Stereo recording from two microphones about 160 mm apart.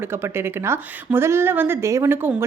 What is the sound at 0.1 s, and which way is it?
A woman's voice, 15° right (ahead or behind).